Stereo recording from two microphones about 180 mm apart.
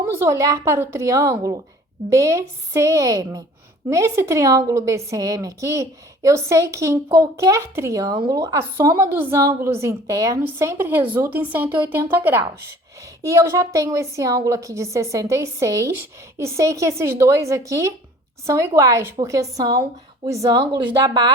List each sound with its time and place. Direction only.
0.2 s a woman's voice: 15° right (ahead or behind)